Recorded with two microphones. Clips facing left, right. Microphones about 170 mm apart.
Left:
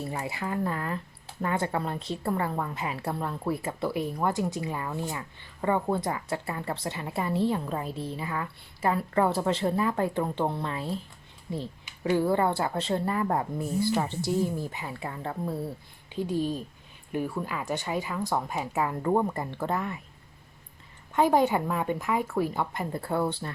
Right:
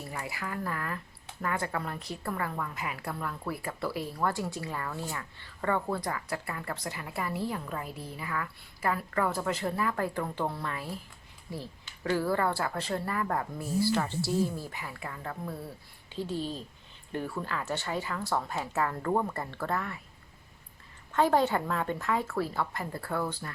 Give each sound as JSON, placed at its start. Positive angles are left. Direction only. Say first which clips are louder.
{"t": 0.0, "sound": "speech", "louder": "left 5 dB", "side_deg": 25}
{"t": 16.1, "sound": "speech", "louder": "left 5 dB", "side_deg": 15}
{"t": 21.1, "sound": "speech", "louder": "left 3 dB", "side_deg": 15}